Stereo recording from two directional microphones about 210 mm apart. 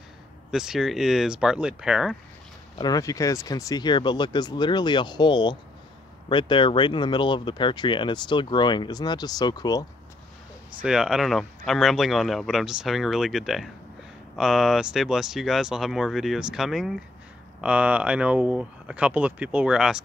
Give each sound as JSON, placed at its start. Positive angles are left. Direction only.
{"t": 0.5, "sound": "speech", "side_deg": 0}
{"t": 2.8, "sound": "speech", "side_deg": 15}
{"t": 10.8, "sound": "speech", "side_deg": -5}